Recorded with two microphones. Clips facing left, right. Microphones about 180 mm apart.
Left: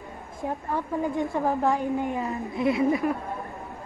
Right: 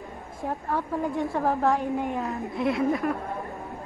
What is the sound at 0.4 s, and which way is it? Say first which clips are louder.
A woman's voice: even; centre (ahead or behind).